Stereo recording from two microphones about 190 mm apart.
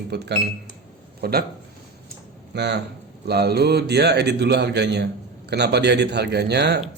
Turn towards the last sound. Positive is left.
turn(degrees=-60)  # may be behind; listen again after turning